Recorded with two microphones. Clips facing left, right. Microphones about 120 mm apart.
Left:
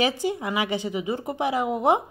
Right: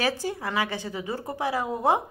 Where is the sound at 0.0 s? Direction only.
15° left (ahead or behind).